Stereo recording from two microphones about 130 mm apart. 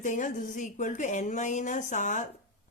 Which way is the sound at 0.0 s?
75° left (ahead or behind).